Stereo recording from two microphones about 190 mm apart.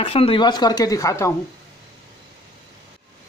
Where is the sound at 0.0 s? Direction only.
30° left (ahead or behind).